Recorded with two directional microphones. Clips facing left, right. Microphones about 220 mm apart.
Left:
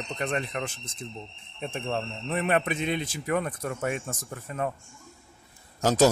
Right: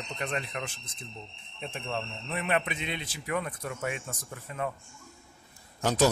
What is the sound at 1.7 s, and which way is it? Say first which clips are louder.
Speech: left 4 dB; 45° left (ahead or behind).